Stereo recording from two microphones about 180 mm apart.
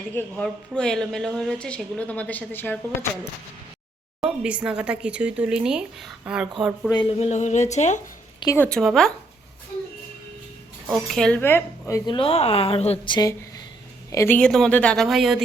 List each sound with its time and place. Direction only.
0.1 s a woman's voice: 10° left (ahead or behind)
4.2 s a woman's voice: 5° right (ahead or behind)
6.9 s speech: 30° left (ahead or behind)
8.5 s a woman's voice: 5° left (ahead or behind)
10.8 s speech: centre (ahead or behind); by 12.1 s 15° left (ahead or behind)
12.1 s speech: 30° left (ahead or behind)
14.1 s a woman's voice: 15° left (ahead or behind)